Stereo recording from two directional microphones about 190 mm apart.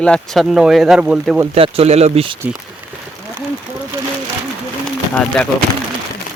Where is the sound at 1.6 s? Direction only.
30° right (ahead or behind).